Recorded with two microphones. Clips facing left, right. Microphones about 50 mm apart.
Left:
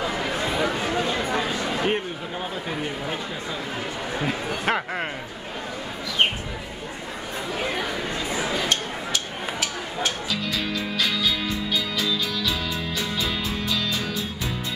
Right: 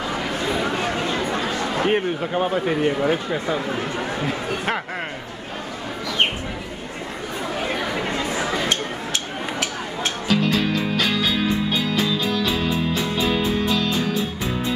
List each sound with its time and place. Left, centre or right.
2.0 s speech: right
4.3 s speech: centre
10.2 s music: right